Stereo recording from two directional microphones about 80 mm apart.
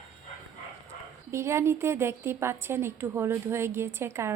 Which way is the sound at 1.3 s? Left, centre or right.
Right.